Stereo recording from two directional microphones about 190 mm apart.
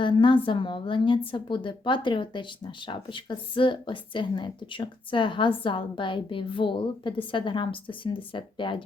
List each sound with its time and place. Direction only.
0.0 s a woman's voice: 25° left (ahead or behind)